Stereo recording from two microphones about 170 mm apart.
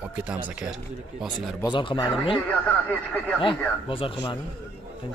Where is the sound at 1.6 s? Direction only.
30° left (ahead or behind).